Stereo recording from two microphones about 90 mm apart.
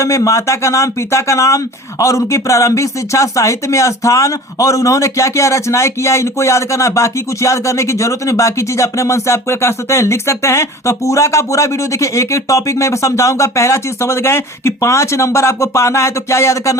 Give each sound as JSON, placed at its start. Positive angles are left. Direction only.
{"t": 0.0, "sound": "speech", "side_deg": 35}